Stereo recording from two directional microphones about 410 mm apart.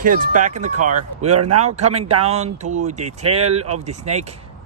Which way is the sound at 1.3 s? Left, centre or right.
Right.